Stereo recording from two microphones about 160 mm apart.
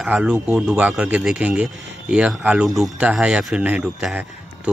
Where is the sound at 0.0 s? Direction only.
5° right (ahead or behind).